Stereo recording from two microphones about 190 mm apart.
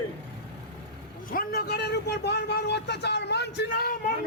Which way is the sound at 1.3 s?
55° left (ahead or behind).